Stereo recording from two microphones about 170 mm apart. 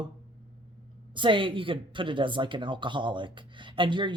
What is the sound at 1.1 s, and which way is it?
Speech, 30° right (ahead or behind).